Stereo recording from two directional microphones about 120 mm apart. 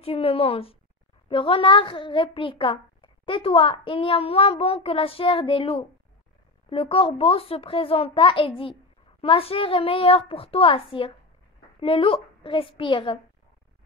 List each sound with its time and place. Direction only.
0.0 s a child's voice: 55° left (ahead or behind)